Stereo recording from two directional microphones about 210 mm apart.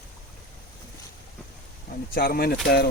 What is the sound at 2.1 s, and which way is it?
Speech, 45° left (ahead or behind).